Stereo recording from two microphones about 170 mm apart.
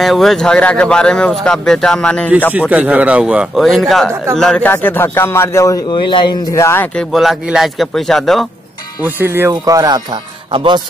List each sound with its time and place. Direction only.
0.0 s speech: centre (ahead or behind)
2.7 s a man's voice: 10° right (ahead or behind); by 7.1 s 10° left (ahead or behind)
7.1 s speech: centre (ahead or behind)
9.0 s speech: 15° right (ahead or behind); by 10.8 s 30° right (ahead or behind)